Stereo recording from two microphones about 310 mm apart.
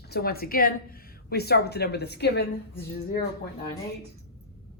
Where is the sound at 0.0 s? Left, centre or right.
Left.